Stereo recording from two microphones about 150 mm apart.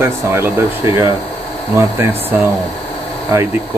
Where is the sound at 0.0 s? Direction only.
15° right (ahead or behind).